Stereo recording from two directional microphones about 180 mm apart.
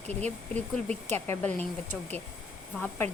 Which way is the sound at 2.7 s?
5° left (ahead or behind).